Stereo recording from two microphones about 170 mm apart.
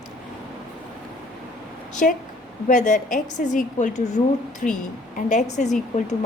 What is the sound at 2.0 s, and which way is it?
A woman's voice, 55° left (ahead or behind).